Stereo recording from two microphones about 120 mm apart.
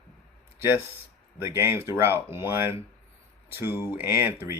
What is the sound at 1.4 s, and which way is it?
Speech, 20° right (ahead or behind).